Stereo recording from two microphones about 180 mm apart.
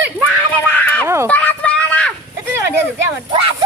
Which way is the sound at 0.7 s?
10° left (ahead or behind).